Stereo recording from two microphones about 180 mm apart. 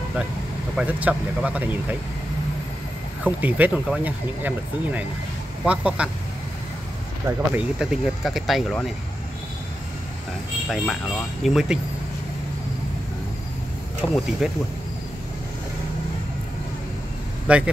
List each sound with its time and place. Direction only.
0.7 s speech: 10° right (ahead or behind)
3.3 s speech: 10° right (ahead or behind)
7.2 s speech: 5° right (ahead or behind)
11.4 s speech: centre (ahead or behind)
14.0 s speech: 15° left (ahead or behind)
14.4 s speech: centre (ahead or behind)
17.5 s speech: 5° right (ahead or behind)